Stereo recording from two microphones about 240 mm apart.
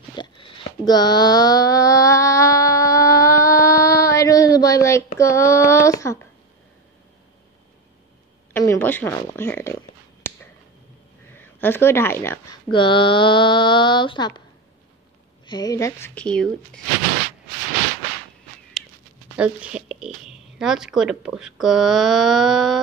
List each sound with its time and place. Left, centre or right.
0.1 s a sound: centre
8.5 s speech: centre
10.2 s a sound: centre
11.3 s speech: centre
12.7 s mantra: left
15.4 s speech: centre
18.8 s dog: centre
19.3 s a sound: centre
20.5 s speech: centre